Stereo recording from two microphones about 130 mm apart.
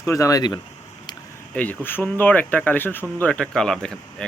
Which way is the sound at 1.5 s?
15° left (ahead or behind).